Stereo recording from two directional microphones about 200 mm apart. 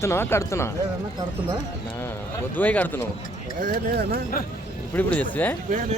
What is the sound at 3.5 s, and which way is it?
Speech, 45° right (ahead or behind).